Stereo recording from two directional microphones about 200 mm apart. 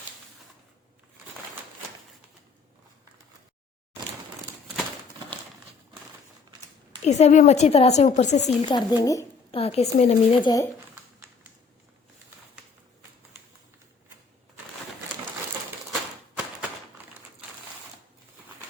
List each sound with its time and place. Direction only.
7.0 s a woman's voice: 35° left (ahead or behind)
8.7 s speech: 20° left (ahead or behind)
9.6 s speech: 30° left (ahead or behind)